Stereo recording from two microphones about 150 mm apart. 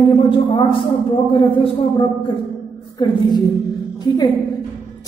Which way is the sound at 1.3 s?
35° left (ahead or behind).